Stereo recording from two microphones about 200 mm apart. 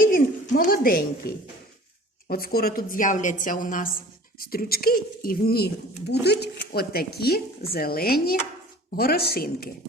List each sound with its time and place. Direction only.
0.0 s a child's voice: 45° left (ahead or behind)
2.2 s speech: 50° left (ahead or behind)